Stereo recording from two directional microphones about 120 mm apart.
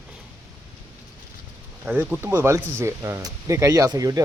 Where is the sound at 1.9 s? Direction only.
15° right (ahead or behind).